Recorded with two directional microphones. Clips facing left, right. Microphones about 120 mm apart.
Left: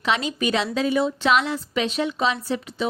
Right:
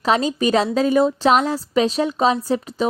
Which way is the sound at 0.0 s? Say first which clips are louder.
Right 5 dB; 40° right (ahead or behind).